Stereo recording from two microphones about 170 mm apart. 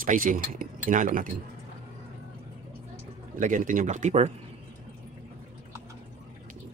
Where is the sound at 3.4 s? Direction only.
50° right (ahead or behind).